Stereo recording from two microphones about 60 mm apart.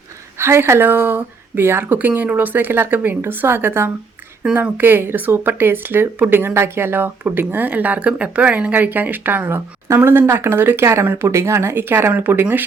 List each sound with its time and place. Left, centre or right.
0.3 s speech: right